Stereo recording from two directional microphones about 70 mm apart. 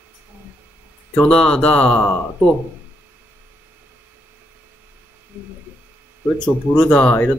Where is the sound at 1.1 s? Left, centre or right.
Centre.